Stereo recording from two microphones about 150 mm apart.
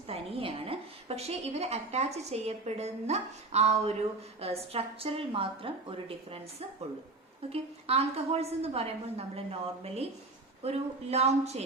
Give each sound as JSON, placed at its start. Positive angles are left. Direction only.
{"t": 0.1, "sound": "a woman's voice", "side_deg": -40}
{"t": 7.5, "sound": "a woman's voice", "side_deg": -40}